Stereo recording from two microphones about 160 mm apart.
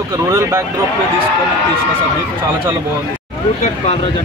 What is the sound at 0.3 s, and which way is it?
Speech, 15° right (ahead or behind).